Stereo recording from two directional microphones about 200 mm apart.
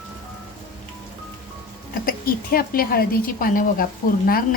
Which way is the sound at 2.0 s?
45° left (ahead or behind).